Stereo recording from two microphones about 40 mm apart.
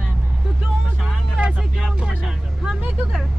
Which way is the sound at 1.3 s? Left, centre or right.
Right.